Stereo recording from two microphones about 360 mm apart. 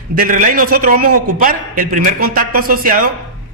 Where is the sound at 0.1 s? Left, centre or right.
Right.